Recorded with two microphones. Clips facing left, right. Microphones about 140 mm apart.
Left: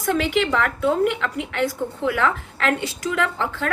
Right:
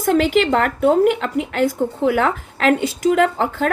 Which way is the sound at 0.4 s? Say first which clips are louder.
Right 5 dB; 45° right (ahead or behind).